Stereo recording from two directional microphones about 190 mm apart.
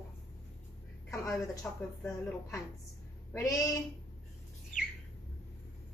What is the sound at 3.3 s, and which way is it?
Speech, 15° left (ahead or behind).